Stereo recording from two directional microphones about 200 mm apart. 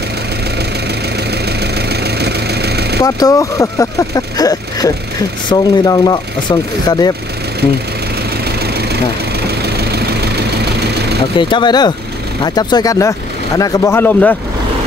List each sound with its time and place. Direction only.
2.1 s engine: 55° right (ahead or behind)
3.0 s speech: 15° left (ahead or behind)
9.9 s vehicle: 55° right (ahead or behind)
11.3 s speech: 25° left (ahead or behind)